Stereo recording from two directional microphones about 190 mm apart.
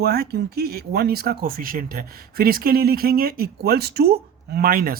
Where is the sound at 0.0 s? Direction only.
55° right (ahead or behind).